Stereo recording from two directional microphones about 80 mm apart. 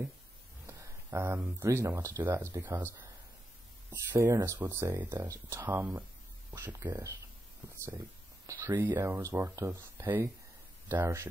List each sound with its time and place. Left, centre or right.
0.7 s speech: right
5.6 s speech: right
8.5 s speech: right